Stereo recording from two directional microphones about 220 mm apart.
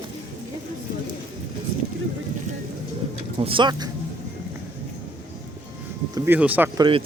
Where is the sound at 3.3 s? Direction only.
20° right (ahead or behind).